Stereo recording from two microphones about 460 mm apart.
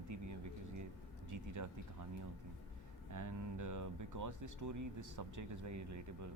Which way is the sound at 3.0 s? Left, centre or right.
Right.